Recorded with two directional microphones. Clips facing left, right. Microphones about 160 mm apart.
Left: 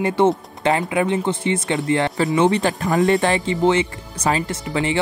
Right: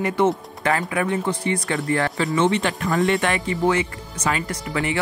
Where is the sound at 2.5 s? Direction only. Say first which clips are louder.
Left 3 dB; 35° left (ahead or behind).